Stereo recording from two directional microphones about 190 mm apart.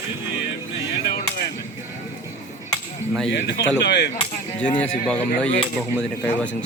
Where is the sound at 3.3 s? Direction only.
60° left (ahead or behind).